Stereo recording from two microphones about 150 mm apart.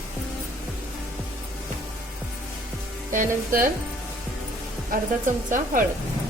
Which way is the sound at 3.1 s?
65° right (ahead or behind).